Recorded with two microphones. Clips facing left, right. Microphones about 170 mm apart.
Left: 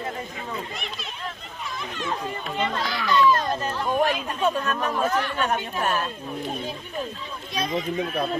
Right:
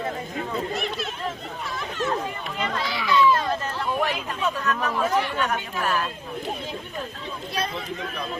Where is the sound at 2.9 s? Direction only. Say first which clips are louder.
Left 1 dB; 5° right (ahead or behind).